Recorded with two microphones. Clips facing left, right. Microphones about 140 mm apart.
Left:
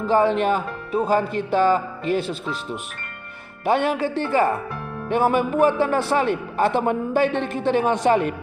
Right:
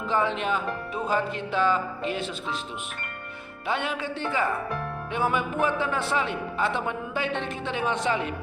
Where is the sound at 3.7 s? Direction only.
45° left (ahead or behind).